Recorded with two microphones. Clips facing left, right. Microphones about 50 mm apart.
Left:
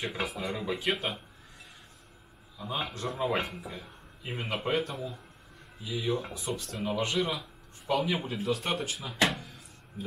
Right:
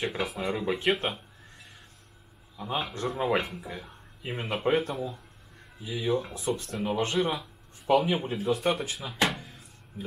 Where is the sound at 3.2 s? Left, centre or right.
Centre.